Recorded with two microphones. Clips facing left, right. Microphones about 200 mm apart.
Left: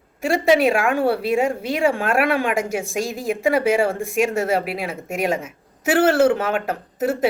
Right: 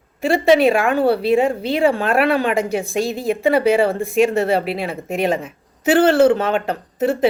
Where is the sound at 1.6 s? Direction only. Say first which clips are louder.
Right 3 dB; 35° right (ahead or behind).